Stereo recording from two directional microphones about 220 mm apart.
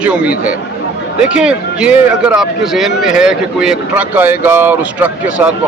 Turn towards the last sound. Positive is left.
turn(degrees=-5)  # may be behind; listen again after turning